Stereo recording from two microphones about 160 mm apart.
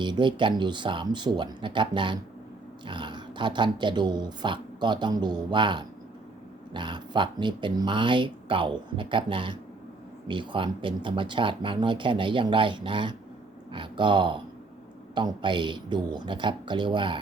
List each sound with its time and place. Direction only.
0.0 s speech: 30° right (ahead or behind)